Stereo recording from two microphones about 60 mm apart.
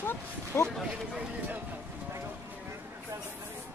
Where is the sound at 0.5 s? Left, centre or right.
Left.